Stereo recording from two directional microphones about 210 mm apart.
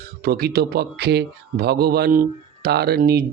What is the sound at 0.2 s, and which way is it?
Speech, 45° right (ahead or behind).